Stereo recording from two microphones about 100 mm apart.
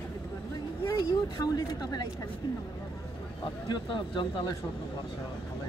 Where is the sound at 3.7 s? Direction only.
55° left (ahead or behind).